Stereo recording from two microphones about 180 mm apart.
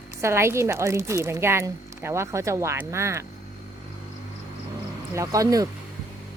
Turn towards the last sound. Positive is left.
turn(degrees=-20)  # may be behind; listen again after turning